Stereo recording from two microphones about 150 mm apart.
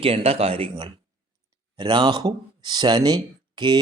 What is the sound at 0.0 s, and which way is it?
Speech, 40° right (ahead or behind).